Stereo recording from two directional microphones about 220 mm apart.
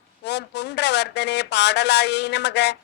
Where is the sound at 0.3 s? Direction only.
50° left (ahead or behind).